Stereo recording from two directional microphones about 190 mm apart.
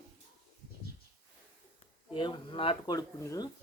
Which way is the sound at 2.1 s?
25° left (ahead or behind).